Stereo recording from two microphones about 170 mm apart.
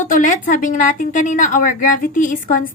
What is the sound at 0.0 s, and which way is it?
A woman's voice, 50° left (ahead or behind).